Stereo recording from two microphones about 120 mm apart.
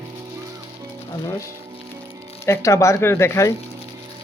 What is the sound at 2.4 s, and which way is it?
Speech, 25° left (ahead or behind).